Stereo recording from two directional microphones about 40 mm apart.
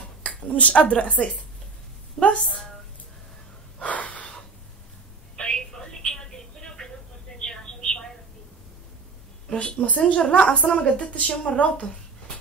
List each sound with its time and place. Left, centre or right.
0.2 s speech: left
2.2 s a woman's voice: centre
3.8 s gasp: left
5.4 s telephone: centre
7.3 s a sound: centre
9.5 s a woman's voice: left